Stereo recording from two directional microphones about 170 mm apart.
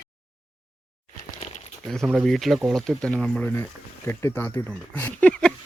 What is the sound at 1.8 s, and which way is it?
Speech, centre (ahead or behind).